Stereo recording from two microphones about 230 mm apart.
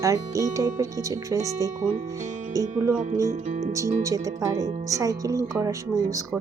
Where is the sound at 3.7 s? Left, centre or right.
Centre.